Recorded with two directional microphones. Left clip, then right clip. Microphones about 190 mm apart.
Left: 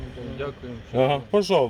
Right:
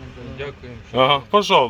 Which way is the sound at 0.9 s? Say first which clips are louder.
Right 5 dB; 20° left (ahead or behind).